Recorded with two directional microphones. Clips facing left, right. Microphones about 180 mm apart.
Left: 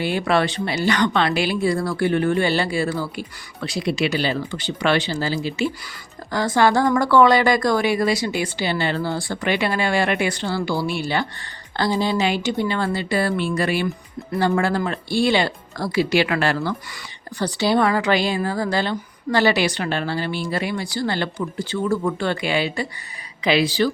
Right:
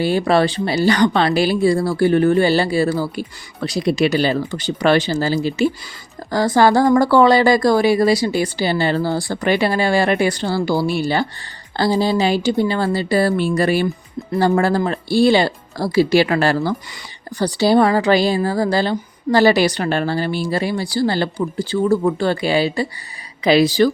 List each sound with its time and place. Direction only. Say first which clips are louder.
0.0 s speech: right 5 dB; 35° right (ahead or behind)